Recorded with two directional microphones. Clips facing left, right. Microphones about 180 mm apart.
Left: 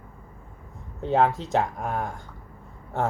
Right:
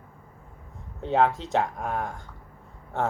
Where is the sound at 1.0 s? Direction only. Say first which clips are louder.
Left 1 dB; 5° left (ahead or behind).